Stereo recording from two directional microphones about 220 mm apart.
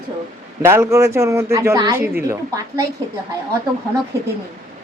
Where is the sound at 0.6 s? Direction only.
10° right (ahead or behind).